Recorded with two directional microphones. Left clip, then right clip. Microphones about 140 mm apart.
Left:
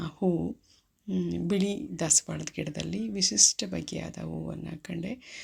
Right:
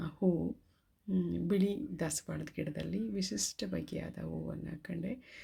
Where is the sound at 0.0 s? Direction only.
15° left (ahead or behind).